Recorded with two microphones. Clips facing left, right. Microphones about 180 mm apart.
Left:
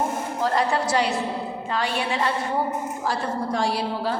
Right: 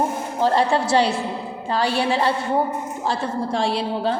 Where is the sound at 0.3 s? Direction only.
30° right (ahead or behind).